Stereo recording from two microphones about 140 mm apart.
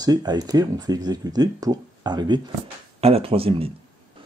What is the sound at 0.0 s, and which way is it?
Speech, 30° right (ahead or behind).